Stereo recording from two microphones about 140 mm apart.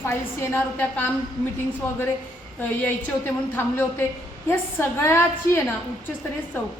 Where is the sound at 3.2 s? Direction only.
15° left (ahead or behind).